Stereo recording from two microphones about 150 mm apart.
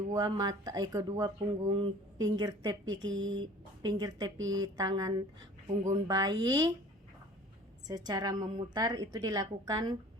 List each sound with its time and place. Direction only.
0.1 s speech: 25° right (ahead or behind)
7.9 s speech: 25° right (ahead or behind)